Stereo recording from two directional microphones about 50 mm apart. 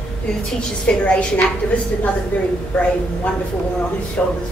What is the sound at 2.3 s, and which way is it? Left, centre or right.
Speech, left.